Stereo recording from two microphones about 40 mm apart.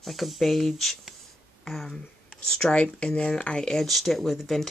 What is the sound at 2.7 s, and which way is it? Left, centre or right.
Speech, left.